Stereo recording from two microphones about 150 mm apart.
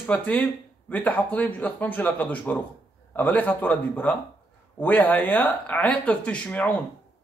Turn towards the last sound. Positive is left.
turn(degrees=10)  # may be behind; listen again after turning